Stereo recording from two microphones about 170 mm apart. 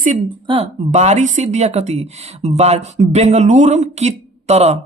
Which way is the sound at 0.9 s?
45° right (ahead or behind).